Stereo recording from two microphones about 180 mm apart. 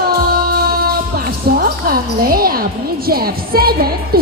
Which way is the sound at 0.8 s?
55° right (ahead or behind).